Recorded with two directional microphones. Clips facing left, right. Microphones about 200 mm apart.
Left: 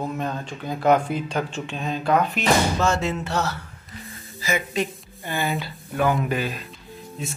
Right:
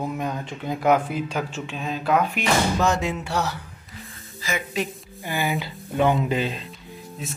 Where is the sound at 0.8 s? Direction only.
5° right (ahead or behind).